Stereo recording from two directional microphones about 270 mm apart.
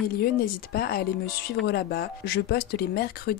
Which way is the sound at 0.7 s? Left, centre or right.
Left.